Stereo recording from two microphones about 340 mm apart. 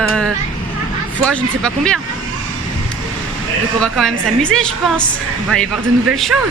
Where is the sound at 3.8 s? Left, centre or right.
Centre.